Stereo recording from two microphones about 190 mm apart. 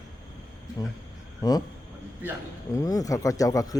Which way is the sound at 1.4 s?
20° left (ahead or behind).